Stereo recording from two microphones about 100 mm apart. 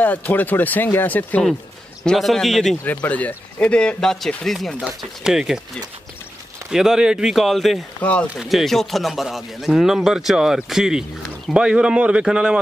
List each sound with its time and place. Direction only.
0.0 s speech: 15° left (ahead or behind)
2.0 s speech: 5° left (ahead or behind)
2.8 s speech: 15° left (ahead or behind)
4.7 s speech: 10° right (ahead or behind)
6.7 s speech: 5° right (ahead or behind)
8.0 s speech: 15° left (ahead or behind)
8.4 s speech: centre (ahead or behind)